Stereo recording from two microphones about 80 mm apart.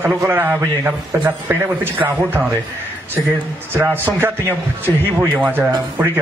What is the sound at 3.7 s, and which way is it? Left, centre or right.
A man's voice, right.